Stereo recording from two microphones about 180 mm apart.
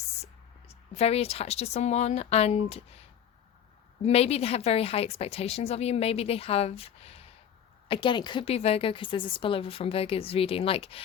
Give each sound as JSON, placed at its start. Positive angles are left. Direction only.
{"t": 0.7, "sound": "a woman's voice", "side_deg": 35}
{"t": 4.0, "sound": "a woman's voice", "side_deg": 35}